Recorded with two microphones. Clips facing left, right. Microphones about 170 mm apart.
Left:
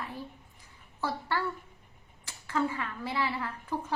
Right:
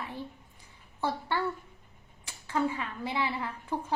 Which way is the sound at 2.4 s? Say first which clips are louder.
Right 1 dB; 20° right (ahead or behind).